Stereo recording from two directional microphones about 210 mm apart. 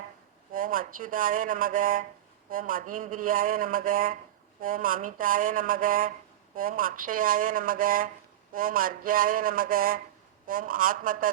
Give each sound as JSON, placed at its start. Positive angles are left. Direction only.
{"t": 0.5, "sound": "a man's voice", "side_deg": -40}
{"t": 8.5, "sound": "a sound", "side_deg": -40}
{"t": 10.4, "sound": "a man's voice", "side_deg": -40}